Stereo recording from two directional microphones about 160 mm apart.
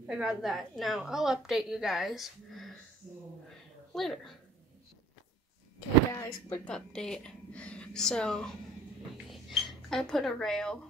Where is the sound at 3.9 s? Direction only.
Centre (ahead or behind).